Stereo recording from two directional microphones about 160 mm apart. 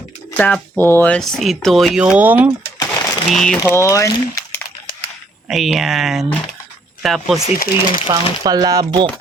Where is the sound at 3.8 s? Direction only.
20° left (ahead or behind).